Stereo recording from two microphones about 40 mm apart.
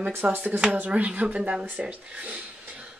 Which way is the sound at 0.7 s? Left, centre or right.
Right.